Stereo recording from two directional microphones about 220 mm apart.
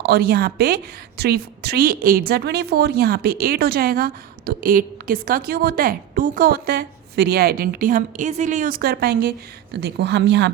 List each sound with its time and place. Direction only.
0.0 s a woman's voice: 45° right (ahead or behind)